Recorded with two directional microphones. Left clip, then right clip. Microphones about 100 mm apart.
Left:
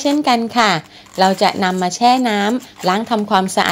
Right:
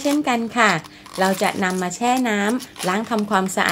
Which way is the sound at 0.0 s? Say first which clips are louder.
Left 5 dB; 40° left (ahead or behind).